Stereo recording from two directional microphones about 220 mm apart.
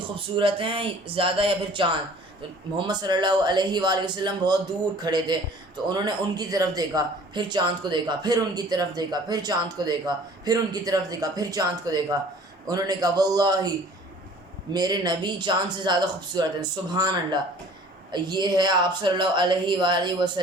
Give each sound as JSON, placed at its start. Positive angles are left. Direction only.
{"t": 0.0, "sound": "a man's voice", "side_deg": -20}
{"t": 14.7, "sound": "a man's voice", "side_deg": -15}